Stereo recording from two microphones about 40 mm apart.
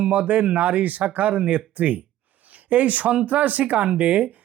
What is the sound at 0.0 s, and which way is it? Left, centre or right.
Speech, right.